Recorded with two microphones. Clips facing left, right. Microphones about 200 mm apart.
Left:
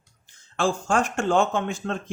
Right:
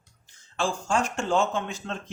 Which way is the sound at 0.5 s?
55° left (ahead or behind).